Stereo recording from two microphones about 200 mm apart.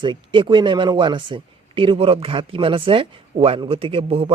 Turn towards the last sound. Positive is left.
turn(degrees=-30)  # may be behind; listen again after turning